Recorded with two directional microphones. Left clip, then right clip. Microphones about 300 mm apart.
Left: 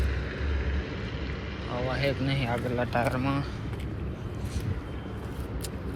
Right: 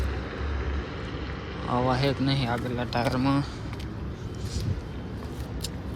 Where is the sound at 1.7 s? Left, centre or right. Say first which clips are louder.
Right 4 dB; centre.